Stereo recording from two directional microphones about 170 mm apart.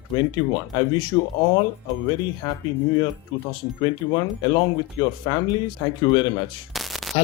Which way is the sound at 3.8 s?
25° left (ahead or behind).